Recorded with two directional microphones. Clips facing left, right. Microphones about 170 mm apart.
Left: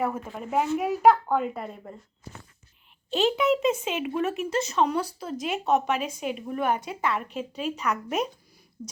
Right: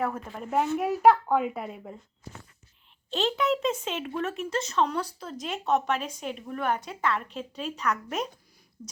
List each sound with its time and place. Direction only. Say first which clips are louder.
0.0 s a child's voice: left 2 dB; 5° left (ahead or behind)
3.1 s speech: left 4 dB; 5° left (ahead or behind)
8.8 s speech: left 5 dB; 20° left (ahead or behind)